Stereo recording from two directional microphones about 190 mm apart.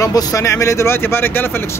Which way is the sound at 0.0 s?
20° left (ahead or behind).